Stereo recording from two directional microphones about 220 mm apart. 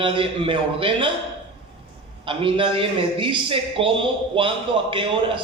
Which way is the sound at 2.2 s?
25° right (ahead or behind).